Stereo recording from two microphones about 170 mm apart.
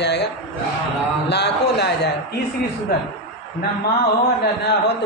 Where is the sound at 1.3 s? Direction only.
80° left.